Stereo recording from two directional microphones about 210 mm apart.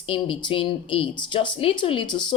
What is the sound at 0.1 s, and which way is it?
Speech, 25° left (ahead or behind).